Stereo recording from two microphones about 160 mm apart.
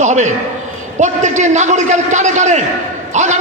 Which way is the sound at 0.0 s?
45° right (ahead or behind).